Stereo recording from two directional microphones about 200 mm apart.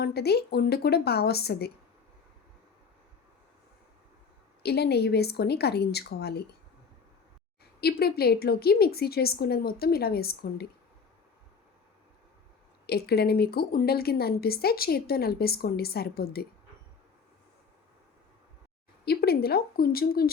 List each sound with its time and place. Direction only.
0.0 s speech: 55° left (ahead or behind)
4.6 s a woman's voice: 55° left (ahead or behind)
7.8 s speech: 50° left (ahead or behind)
12.9 s speech: 55° left (ahead or behind)
19.0 s speech: 50° left (ahead or behind)